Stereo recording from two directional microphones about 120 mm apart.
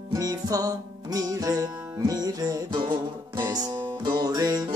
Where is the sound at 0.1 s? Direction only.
30° right (ahead or behind).